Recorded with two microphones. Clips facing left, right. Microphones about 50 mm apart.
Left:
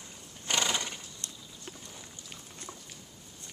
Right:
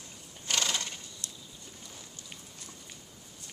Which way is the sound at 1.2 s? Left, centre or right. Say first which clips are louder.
Even; left.